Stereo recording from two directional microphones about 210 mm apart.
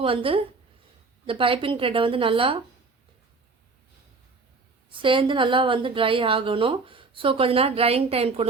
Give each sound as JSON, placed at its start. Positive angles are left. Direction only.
{"t": 0.0, "sound": "a woman's voice", "side_deg": -25}
{"t": 4.9, "sound": "a woman's voice", "side_deg": -25}